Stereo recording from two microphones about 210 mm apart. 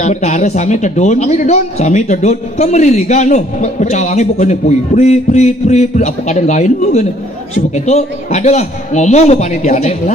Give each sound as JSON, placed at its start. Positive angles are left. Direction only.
{"t": 0.0, "sound": "a man's voice", "side_deg": 35}